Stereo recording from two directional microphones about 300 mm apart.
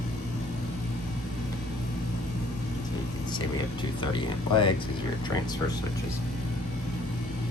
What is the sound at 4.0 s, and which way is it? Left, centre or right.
Speech, centre.